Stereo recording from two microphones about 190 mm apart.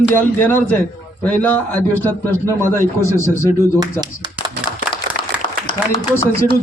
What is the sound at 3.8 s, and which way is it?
Speech, 20° right (ahead or behind).